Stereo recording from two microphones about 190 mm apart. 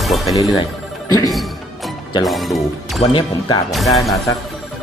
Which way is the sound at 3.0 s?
25° left (ahead or behind).